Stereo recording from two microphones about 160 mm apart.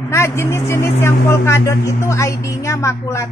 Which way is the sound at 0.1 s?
15° left (ahead or behind).